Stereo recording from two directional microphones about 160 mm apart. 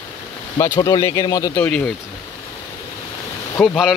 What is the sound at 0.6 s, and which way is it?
Speech, 20° left (ahead or behind).